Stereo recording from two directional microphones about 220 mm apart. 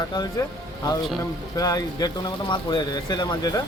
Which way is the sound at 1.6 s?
15° left (ahead or behind).